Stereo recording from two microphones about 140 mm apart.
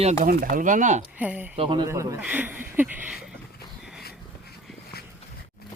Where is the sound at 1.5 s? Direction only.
40° right (ahead or behind).